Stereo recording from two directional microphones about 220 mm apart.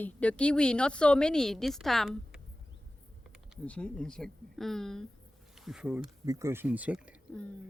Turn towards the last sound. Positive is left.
turn(degrees=-5)  # may be behind; listen again after turning